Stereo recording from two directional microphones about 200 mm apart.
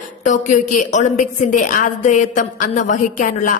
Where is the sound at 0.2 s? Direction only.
40° left (ahead or behind).